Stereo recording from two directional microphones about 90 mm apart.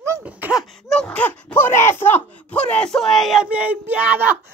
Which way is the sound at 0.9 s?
10° left (ahead or behind).